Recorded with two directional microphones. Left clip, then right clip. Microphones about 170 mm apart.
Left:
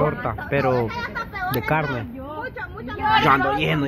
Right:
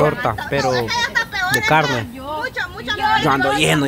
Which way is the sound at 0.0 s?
40° right (ahead or behind).